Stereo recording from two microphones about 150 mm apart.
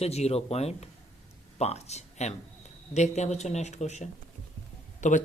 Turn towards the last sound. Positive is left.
turn(degrees=55)  # may be behind; listen again after turning